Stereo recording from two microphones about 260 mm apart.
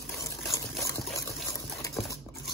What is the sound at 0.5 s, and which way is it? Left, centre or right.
Trickle, centre.